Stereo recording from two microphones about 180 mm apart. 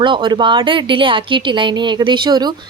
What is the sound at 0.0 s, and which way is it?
A woman's voice, 25° right (ahead or behind).